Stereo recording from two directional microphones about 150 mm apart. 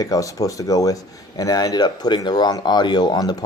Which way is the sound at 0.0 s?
25° left (ahead or behind).